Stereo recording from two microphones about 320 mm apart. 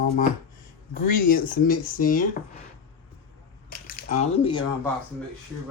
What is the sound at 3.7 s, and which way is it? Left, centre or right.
Speech, left.